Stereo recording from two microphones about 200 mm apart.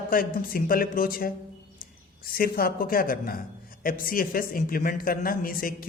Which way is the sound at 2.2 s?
45° left (ahead or behind).